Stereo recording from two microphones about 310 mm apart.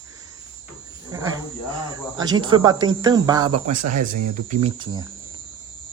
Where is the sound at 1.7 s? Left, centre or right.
Centre.